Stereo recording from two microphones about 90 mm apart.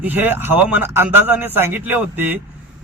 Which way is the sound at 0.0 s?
20° right (ahead or behind).